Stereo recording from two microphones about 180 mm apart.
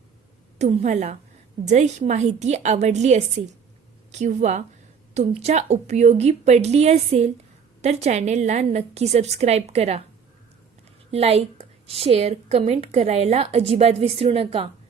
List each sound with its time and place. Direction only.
0.6 s a woman's voice: 40° right (ahead or behind)
11.1 s a woman's voice: 35° right (ahead or behind)